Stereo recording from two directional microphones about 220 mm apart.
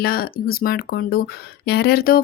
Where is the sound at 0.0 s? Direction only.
45° left (ahead or behind).